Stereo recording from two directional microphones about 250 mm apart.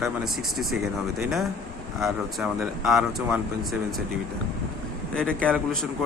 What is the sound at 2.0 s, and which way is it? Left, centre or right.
Speech, centre.